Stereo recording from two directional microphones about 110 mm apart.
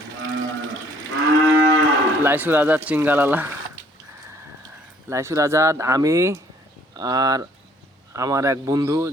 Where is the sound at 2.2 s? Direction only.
20° right (ahead or behind).